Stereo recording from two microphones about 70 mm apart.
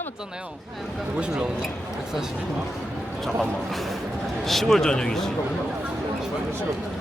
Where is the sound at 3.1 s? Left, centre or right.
Centre.